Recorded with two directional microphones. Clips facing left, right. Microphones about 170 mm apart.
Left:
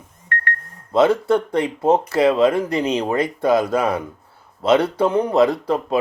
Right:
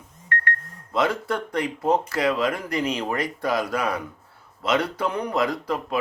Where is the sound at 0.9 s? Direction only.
25° left (ahead or behind).